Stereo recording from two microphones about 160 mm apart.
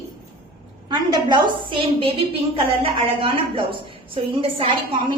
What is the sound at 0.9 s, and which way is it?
A woman's voice, 30° right (ahead or behind).